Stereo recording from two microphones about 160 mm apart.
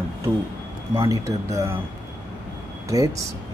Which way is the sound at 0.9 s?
20° right (ahead or behind).